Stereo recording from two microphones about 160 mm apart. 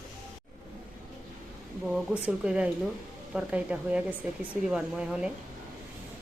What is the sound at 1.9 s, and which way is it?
Speech, 5° right (ahead or behind).